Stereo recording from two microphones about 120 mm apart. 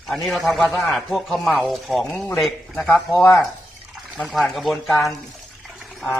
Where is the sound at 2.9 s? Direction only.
Centre (ahead or behind).